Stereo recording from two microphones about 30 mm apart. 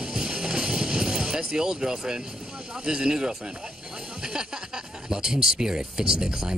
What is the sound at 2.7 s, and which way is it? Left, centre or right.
Speech, right.